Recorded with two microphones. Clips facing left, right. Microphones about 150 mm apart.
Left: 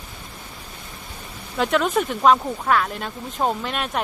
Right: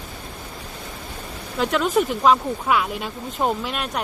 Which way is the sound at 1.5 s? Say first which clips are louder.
Even; centre (ahead or behind).